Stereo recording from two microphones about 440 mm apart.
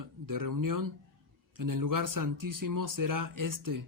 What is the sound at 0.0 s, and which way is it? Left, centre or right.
A man's voice, right.